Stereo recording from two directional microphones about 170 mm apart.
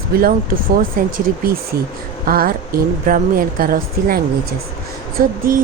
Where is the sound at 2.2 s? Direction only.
60° right (ahead or behind).